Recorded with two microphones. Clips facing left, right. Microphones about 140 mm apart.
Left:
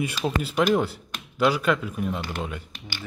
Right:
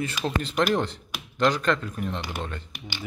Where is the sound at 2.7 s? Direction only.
15° right (ahead or behind).